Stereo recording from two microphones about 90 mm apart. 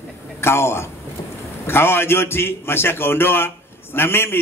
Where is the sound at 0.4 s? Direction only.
30° left (ahead or behind).